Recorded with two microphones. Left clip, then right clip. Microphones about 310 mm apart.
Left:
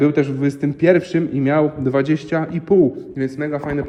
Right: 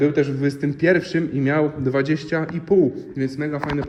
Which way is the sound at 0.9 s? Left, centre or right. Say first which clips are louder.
Left 3 dB; left.